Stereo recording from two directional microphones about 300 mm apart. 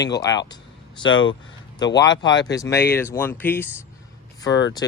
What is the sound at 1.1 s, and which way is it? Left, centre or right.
Speech, left.